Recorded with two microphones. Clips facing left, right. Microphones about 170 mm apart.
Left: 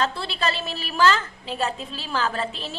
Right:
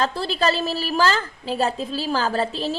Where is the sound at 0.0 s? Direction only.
40° right (ahead or behind).